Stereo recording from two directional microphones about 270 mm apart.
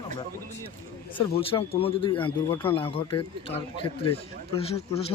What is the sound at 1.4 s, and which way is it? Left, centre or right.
Speech, left.